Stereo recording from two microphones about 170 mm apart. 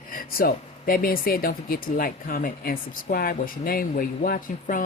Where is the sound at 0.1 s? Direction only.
55° left (ahead or behind).